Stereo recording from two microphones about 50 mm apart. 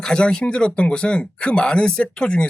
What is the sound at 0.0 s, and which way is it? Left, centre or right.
Speech, centre.